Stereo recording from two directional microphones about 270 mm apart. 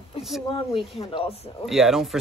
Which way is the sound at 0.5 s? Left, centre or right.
Centre.